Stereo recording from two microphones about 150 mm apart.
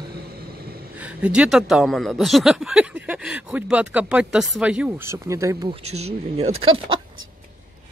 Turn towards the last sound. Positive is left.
turn(degrees=-35)  # may be behind; listen again after turning